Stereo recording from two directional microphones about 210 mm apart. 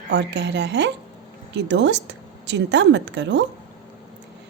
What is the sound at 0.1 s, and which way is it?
A woman's voice, 55° right (ahead or behind).